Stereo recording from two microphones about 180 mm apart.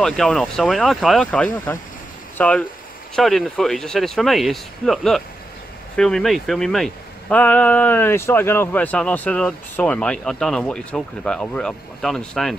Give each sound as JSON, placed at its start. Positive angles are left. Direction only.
{"t": 0.0, "sound": "speech", "side_deg": 5}